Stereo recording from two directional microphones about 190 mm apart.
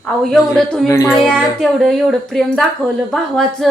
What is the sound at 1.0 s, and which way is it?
Speech, centre (ahead or behind).